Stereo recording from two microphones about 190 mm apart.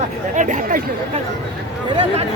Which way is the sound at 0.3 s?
40° right (ahead or behind).